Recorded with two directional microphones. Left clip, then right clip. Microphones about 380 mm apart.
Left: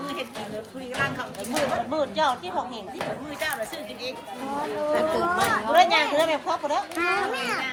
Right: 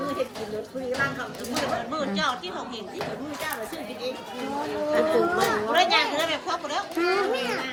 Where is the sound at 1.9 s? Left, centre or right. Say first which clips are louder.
Left 3 dB; centre.